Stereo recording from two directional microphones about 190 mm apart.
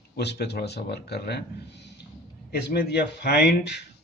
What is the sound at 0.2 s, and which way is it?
Speech, 60° left (ahead or behind).